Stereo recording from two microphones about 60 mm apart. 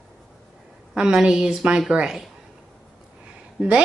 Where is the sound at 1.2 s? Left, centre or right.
Centre.